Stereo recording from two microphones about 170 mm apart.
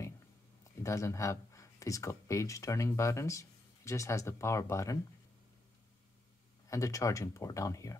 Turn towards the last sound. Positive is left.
turn(degrees=20)  # may be behind; listen again after turning